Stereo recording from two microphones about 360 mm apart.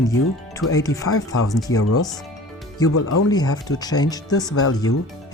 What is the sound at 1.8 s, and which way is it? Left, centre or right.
Speech, left.